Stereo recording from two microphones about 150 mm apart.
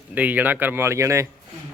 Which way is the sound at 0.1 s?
10° right (ahead or behind).